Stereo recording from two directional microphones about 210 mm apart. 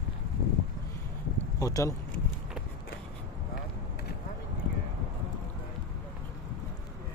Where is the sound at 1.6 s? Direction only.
15° left (ahead or behind).